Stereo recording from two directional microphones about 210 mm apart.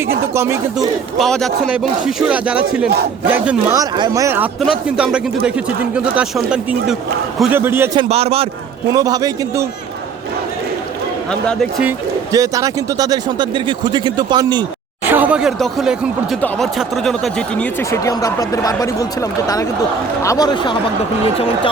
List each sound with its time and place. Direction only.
0.3 s a man's voice: 15° right (ahead or behind)
1.2 s a man's voice: centre (ahead or behind)
3.8 s a man's voice: 20° right (ahead or behind)
4.6 s a man's voice: centre (ahead or behind)
7.9 s speech: 30° right (ahead or behind)
8.9 s a man's voice: 20° right (ahead or behind)
11.3 s speech: 5° left (ahead or behind)
11.8 s speech: 15° right (ahead or behind)
15.0 s speech: 10° right (ahead or behind); by 21.7 s 25° left (ahead or behind)